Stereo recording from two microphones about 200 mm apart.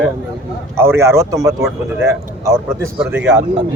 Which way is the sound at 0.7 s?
10° right (ahead or behind).